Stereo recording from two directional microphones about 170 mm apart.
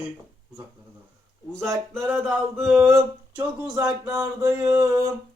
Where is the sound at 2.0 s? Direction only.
10° right (ahead or behind).